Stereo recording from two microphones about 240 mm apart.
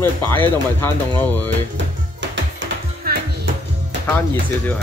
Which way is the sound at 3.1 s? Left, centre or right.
Right.